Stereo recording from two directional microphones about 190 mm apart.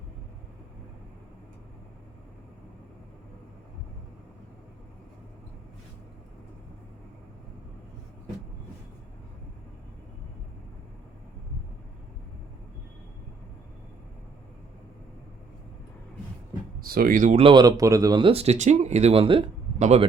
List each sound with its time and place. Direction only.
16.8 s speech: 50° right (ahead or behind)
17.4 s speech: 25° right (ahead or behind)